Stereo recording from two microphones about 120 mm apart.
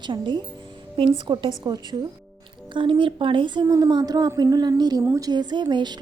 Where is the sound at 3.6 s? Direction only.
30° right (ahead or behind).